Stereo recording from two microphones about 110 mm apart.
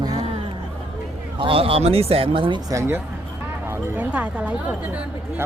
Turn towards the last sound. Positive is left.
turn(degrees=-10)  # may be behind; listen again after turning